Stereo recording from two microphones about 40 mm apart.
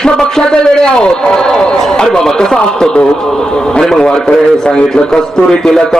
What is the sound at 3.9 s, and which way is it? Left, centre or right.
A man's voice, left.